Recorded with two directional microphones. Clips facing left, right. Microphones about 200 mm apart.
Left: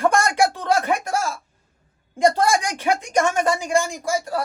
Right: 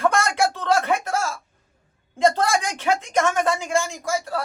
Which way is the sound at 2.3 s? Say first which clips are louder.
Left 2 dB; 15° left (ahead or behind).